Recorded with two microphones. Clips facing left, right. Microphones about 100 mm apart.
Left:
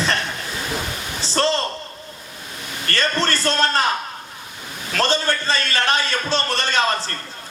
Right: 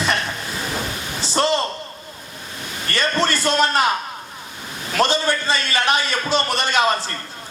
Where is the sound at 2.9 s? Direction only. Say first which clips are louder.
Right 1 dB; 15° right (ahead or behind).